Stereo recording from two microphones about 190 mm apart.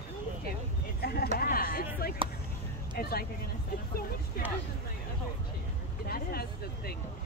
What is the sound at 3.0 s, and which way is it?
Speech, 50° left (ahead or behind).